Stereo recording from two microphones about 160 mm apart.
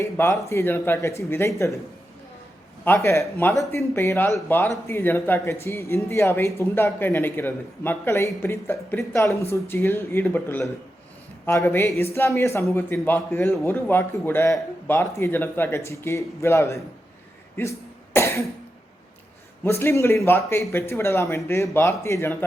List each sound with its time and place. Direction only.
0.0 s speech: 20° left (ahead or behind)
2.8 s speech: 15° left (ahead or behind)
17.6 s cough: 15° left (ahead or behind)
19.6 s speech: 15° left (ahead or behind)